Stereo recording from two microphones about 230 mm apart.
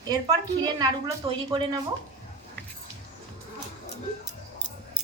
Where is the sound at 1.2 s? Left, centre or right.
Right.